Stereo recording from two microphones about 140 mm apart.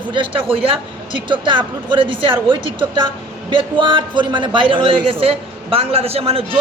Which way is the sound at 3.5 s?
35° right (ahead or behind).